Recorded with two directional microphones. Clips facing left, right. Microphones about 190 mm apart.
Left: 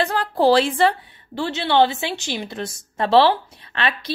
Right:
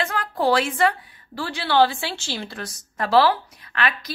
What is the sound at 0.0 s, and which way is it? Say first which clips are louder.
A woman's voice: left 5 dB; 35° left (ahead or behind).